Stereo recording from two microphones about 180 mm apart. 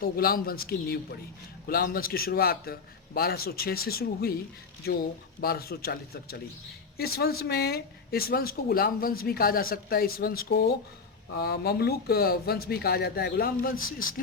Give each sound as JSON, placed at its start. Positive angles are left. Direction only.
{"t": 0.0, "sound": "speech", "side_deg": 55}